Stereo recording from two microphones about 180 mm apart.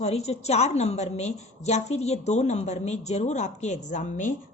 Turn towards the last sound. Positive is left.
turn(degrees=45)  # may be behind; listen again after turning